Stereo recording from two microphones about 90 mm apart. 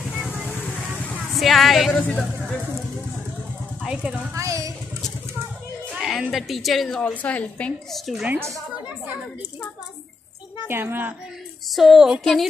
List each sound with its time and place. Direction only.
1.3 s speech: centre (ahead or behind)
1.9 s a woman's voice: 15° left (ahead or behind)
3.8 s speech: 10° right (ahead or behind)
4.3 s a woman's voice: 35° right (ahead or behind)
5.9 s a woman's voice: centre (ahead or behind)
7.9 s a woman's voice: 5° right (ahead or behind)
10.7 s a woman's voice: 25° right (ahead or behind)
11.7 s a woman's voice: centre (ahead or behind)